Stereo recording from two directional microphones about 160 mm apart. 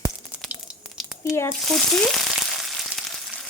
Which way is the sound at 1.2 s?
15° left (ahead or behind).